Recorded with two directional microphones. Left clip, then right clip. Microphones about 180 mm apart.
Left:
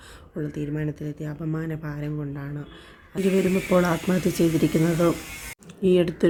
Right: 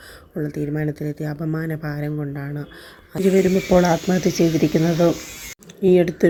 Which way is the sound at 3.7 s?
15° right (ahead or behind).